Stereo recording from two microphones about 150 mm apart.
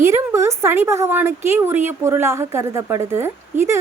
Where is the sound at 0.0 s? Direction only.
20° right (ahead or behind).